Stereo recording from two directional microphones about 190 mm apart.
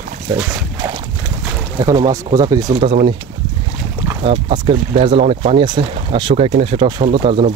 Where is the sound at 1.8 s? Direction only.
20° right (ahead or behind).